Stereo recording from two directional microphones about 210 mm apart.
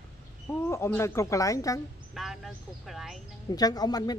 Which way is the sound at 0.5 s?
10° left (ahead or behind).